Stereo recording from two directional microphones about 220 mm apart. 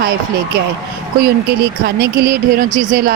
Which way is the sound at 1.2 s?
45° right (ahead or behind).